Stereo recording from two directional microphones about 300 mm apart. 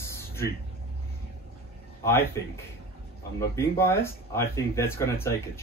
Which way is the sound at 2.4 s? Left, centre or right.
Centre.